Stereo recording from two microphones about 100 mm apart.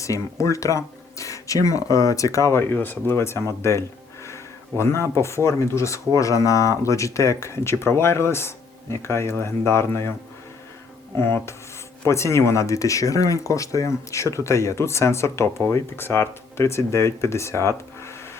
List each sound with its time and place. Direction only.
0.0 s speech: 30° left (ahead or behind)
11.2 s speech: 25° left (ahead or behind)